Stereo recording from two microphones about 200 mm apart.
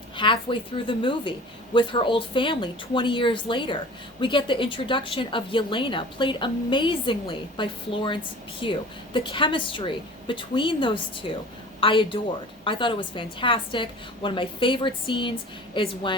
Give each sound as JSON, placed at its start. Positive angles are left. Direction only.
{"t": 0.2, "sound": "a woman's voice", "side_deg": 25}